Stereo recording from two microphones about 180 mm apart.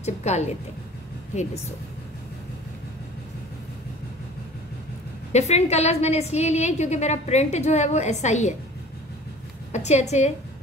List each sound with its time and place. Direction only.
0.0 s a woman's voice: 40° left (ahead or behind)
5.3 s a woman's voice: 40° left (ahead or behind)
9.7 s a woman's voice: 40° left (ahead or behind)